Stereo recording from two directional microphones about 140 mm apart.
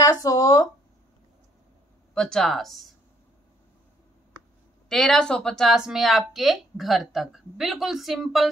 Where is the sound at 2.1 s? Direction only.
5° left (ahead or behind).